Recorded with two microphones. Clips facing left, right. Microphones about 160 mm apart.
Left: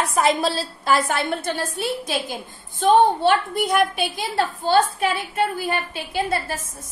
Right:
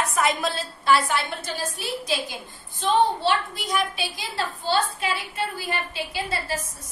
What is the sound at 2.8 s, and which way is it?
A woman's voice, 50° left (ahead or behind).